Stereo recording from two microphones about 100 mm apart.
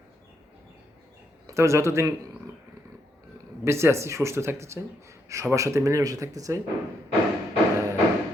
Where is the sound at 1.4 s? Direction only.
30° right (ahead or behind).